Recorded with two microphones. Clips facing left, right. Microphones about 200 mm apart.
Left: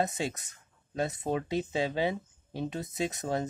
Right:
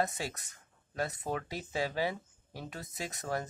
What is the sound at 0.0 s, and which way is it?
Speech, 20° left (ahead or behind).